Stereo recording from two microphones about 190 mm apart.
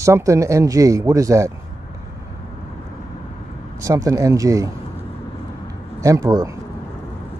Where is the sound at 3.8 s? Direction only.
15° right (ahead or behind).